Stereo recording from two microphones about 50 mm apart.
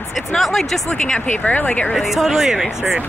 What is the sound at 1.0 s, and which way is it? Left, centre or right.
Speech, centre.